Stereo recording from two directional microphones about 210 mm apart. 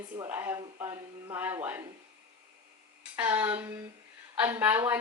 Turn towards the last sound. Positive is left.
turn(degrees=-10)  # may be behind; listen again after turning